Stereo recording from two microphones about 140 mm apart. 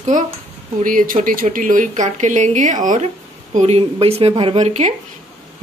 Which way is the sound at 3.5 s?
50° right (ahead or behind).